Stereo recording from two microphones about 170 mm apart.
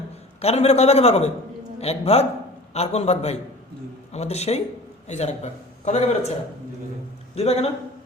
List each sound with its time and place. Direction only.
0.4 s a man's voice: 35° left (ahead or behind)
7.3 s a man's voice: 40° left (ahead or behind)